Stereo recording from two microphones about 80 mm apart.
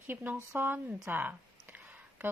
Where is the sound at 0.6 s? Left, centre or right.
Right.